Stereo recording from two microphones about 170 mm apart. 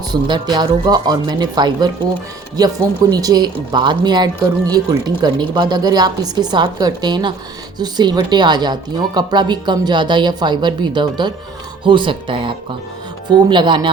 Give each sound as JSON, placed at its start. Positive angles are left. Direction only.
{"t": 0.1, "sound": "a woman's voice", "side_deg": -25}
{"t": 3.1, "sound": "a woman's voice", "side_deg": -20}